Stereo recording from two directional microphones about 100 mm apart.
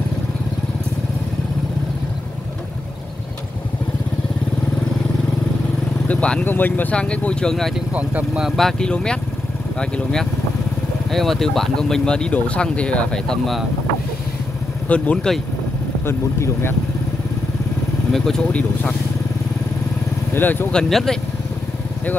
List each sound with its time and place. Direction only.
6.0 s speech: 10° left (ahead or behind)
7.9 s speech: 15° right (ahead or behind)
8.5 s speech: 5° left (ahead or behind)
14.9 s speech: 10° left (ahead or behind)
16.1 s speech: 25° left (ahead or behind)
18.1 s speech: 5° left (ahead or behind)
20.3 s speech: 20° left (ahead or behind)
20.7 s speech: 5° left (ahead or behind)